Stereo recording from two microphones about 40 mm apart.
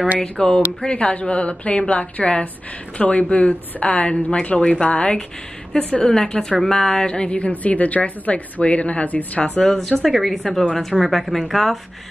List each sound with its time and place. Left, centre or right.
0.2 s speech: centre
0.9 s a woman's voice: left
6.0 s speech: centre
7.1 s a woman's voice: left
7.3 s a woman's voice: left
9.8 s speech: centre